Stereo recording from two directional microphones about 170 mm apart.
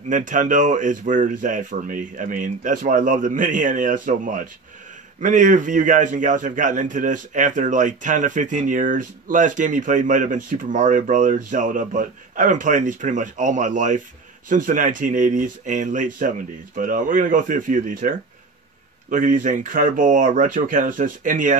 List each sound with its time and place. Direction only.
0.1 s a man's voice: 50° right (ahead or behind)